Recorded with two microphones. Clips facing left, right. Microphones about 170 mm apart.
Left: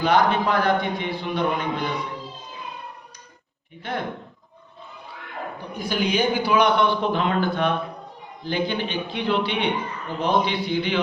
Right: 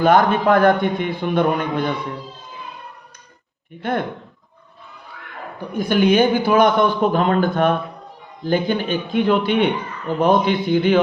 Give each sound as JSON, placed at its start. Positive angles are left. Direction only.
{"t": 0.0, "sound": "a man's voice", "side_deg": -50}
{"t": 3.8, "sound": "a man's voice", "side_deg": -50}
{"t": 5.7, "sound": "a man's voice", "side_deg": -55}